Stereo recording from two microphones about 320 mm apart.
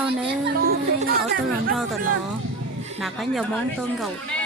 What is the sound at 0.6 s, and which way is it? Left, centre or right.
Music, right.